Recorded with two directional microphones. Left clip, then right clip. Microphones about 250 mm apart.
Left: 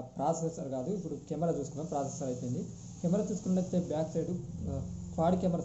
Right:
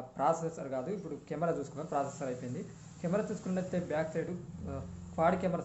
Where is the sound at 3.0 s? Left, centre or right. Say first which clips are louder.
Left 1 dB; centre.